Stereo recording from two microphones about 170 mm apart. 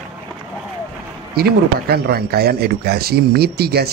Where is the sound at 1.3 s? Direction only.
65° right (ahead or behind).